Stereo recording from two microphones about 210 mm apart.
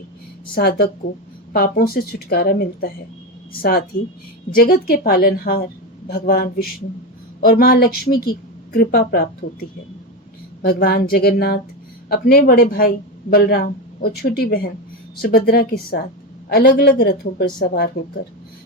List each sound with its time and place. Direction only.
0.5 s a woman's voice: 50° left (ahead or behind)